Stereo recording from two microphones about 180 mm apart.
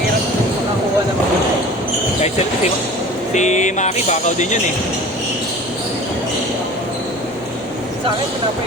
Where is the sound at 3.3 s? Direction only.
40° left (ahead or behind).